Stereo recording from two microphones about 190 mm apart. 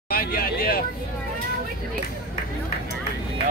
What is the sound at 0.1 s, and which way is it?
Speech, 55° left (ahead or behind).